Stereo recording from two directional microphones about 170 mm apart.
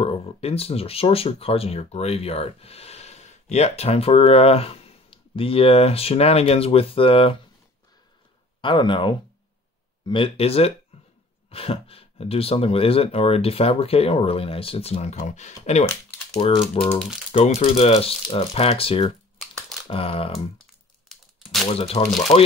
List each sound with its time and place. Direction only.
0.0 s speech: 35° left (ahead or behind)
8.5 s speech: 30° left (ahead or behind)
16.8 s speech: 35° left (ahead or behind)
21.1 s crumpling: centre (ahead or behind)
21.7 s speech: 35° left (ahead or behind)